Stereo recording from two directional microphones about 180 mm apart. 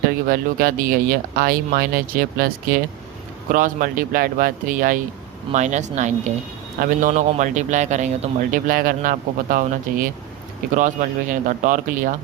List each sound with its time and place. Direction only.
0.3 s a man's voice: 50° right (ahead or behind)